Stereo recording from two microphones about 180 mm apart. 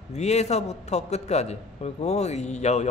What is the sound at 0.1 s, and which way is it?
A man's voice, 40° left (ahead or behind).